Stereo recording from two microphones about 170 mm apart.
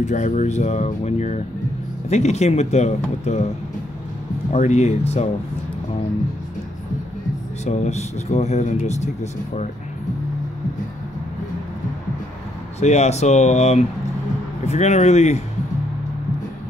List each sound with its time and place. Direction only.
0.0 s speech: 45° left (ahead or behind)
4.5 s speech: 40° left (ahead or behind)
7.6 s speech: 40° left (ahead or behind)
12.8 s speech: 45° left (ahead or behind)